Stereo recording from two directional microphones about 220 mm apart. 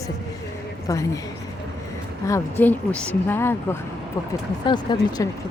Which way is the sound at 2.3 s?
10° left (ahead or behind).